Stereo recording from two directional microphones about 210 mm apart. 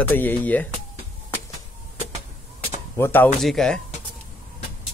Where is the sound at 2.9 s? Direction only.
10° left (ahead or behind).